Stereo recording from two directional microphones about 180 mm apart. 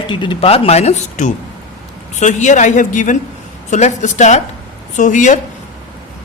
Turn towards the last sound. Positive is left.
turn(degrees=45)  # may be behind; listen again after turning